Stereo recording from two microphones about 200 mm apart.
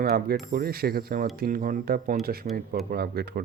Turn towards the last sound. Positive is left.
turn(degrees=-50)  # may be behind; listen again after turning